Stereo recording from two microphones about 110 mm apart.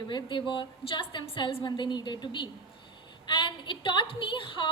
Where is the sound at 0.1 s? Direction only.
45° left (ahead or behind).